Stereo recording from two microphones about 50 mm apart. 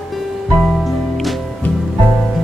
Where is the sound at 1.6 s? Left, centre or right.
Left.